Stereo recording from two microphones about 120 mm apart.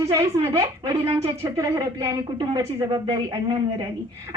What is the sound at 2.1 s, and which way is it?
A woman's voice, 30° right (ahead or behind).